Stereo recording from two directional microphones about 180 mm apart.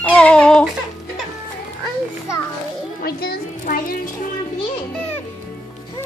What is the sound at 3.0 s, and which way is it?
Music, 60° left (ahead or behind).